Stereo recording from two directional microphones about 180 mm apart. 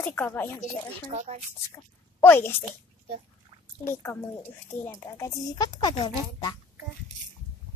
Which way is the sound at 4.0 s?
15° left (ahead or behind).